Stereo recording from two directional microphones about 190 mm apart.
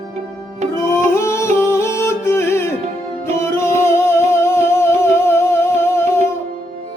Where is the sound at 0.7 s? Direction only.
15° left (ahead or behind).